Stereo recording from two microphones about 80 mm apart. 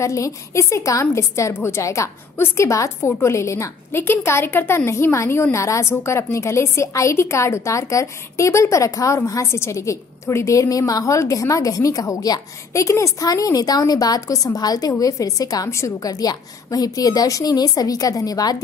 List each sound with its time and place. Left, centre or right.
0.0 s a woman's voice: left